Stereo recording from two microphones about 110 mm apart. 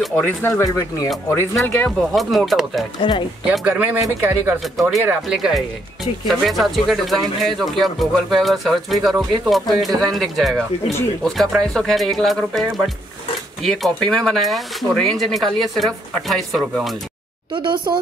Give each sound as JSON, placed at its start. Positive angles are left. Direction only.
{"t": 0.1, "sound": "speech", "side_deg": 15}
{"t": 0.5, "sound": "speech", "side_deg": 30}
{"t": 2.1, "sound": "speech", "side_deg": 0}
{"t": 3.0, "sound": "speech", "side_deg": 50}
{"t": 3.6, "sound": "speech", "side_deg": -15}
{"t": 5.0, "sound": "speech", "side_deg": -10}
{"t": 17.6, "sound": "speech", "side_deg": -45}